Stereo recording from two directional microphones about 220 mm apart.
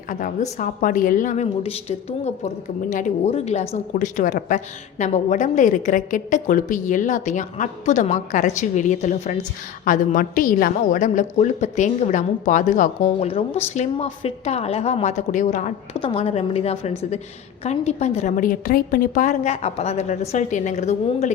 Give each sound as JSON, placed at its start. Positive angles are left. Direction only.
{"t": 0.1, "sound": "a woman's voice", "side_deg": 35}